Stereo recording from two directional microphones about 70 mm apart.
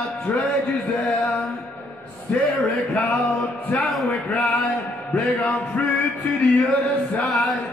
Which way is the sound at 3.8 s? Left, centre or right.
Centre.